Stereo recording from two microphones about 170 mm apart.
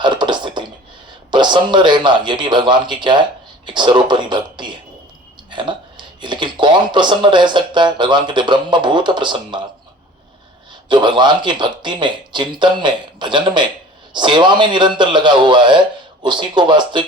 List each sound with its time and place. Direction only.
0.0 s a sound: 25° right (ahead or behind)
1.3 s speech: 25° right (ahead or behind)
10.8 s speech: 25° right (ahead or behind)